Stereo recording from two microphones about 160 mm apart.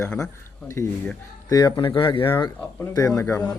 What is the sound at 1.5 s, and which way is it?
Speech, 25° left (ahead or behind).